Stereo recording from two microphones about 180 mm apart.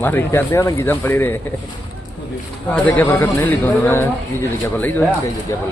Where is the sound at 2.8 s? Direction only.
10° left (ahead or behind).